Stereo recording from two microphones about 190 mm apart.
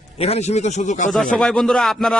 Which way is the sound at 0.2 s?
35° left (ahead or behind).